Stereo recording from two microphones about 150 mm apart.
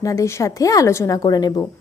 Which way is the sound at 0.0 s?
20° left (ahead or behind).